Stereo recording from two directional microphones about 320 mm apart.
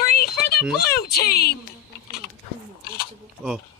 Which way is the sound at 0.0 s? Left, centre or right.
Left.